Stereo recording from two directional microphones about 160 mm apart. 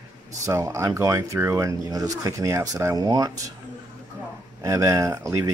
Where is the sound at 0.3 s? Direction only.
20° right (ahead or behind).